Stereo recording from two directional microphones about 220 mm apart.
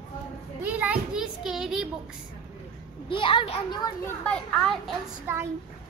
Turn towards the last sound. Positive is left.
turn(degrees=-10)  # may be behind; listen again after turning